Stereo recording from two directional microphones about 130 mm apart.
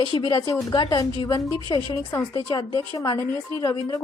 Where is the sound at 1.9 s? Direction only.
20° left (ahead or behind).